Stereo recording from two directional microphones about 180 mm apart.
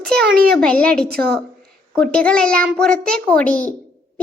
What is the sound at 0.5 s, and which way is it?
A child's voice, 5° left (ahead or behind).